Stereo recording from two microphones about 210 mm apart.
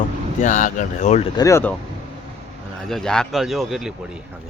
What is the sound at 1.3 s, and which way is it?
Speech, 15° left (ahead or behind).